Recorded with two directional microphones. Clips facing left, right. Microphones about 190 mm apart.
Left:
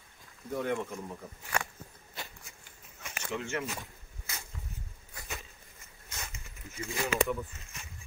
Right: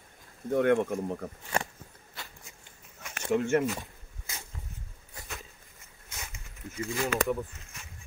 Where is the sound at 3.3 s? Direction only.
50° right (ahead or behind).